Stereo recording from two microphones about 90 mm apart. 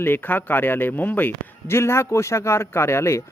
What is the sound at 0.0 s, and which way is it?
Speech, 20° left (ahead or behind).